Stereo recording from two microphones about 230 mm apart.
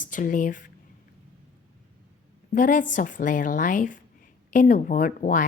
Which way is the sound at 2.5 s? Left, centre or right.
Left.